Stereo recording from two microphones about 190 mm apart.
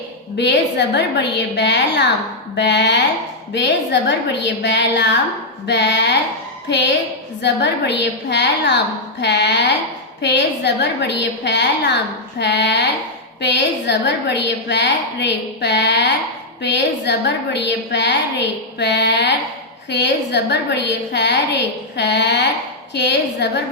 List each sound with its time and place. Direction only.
0.3 s a woman's voice: 65° left (ahead or behind)